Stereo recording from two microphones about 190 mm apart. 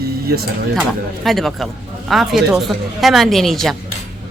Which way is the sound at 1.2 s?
Centre (ahead or behind).